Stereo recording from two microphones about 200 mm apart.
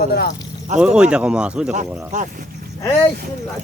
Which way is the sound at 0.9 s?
5° right (ahead or behind).